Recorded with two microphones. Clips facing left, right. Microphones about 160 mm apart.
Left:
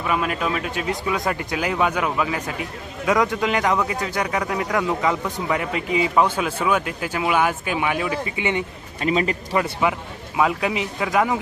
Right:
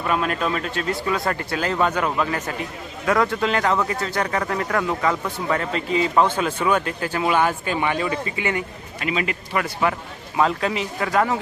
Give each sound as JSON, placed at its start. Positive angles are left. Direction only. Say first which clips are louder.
{"t": 0.0, "sound": "speech", "louder": "right 1 dB", "side_deg": 5}
{"t": 3.1, "sound": "speech", "louder": "even", "side_deg": 15}
{"t": 8.4, "sound": "speech", "louder": "left 2 dB", "side_deg": 20}
{"t": 9.0, "sound": "a man's voice", "louder": "left 4 dB", "side_deg": 35}
{"t": 9.5, "sound": "speech", "louder": "left 2 dB", "side_deg": 25}
{"t": 10.3, "sound": "speech", "louder": "even", "side_deg": 10}